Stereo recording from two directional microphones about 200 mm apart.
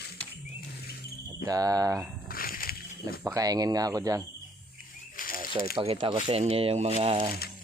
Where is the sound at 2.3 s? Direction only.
45° left (ahead or behind).